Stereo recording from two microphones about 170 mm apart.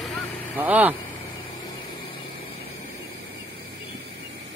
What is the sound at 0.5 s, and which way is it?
Speech, 10° right (ahead or behind).